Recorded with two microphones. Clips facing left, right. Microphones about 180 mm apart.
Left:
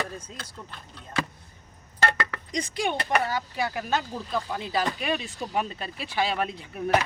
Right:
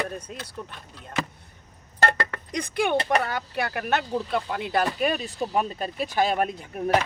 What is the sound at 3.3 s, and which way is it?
Speech, 60° right (ahead or behind).